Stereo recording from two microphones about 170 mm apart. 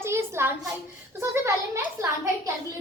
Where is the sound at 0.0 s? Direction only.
15° right (ahead or behind).